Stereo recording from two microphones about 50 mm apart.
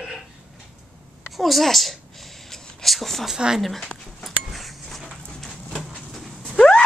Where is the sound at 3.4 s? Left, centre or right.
Centre.